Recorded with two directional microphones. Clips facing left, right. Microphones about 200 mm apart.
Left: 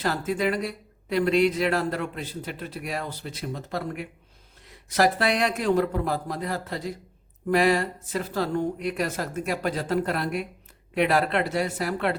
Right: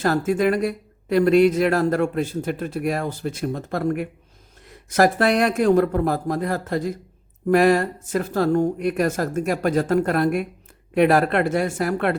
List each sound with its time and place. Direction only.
0.0 s speech: 45° right (ahead or behind)